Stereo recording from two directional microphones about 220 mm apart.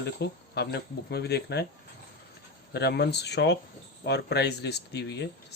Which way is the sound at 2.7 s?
50° left (ahead or behind).